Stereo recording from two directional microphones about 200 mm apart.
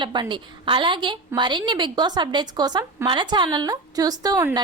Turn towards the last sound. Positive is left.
turn(degrees=-20)  # may be behind; listen again after turning